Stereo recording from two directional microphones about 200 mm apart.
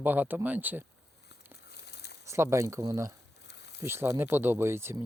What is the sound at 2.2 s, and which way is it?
Speech, 15° right (ahead or behind).